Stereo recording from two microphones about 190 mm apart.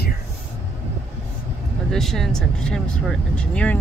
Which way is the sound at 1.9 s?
Centre (ahead or behind).